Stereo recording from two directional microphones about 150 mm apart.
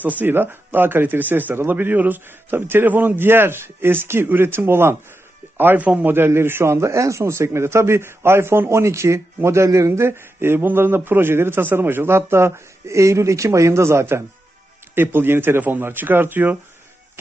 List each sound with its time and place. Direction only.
0.0 s a man's voice: 10° right (ahead or behind)